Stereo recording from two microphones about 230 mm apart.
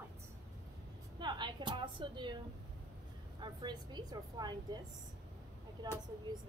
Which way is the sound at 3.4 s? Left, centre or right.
Centre.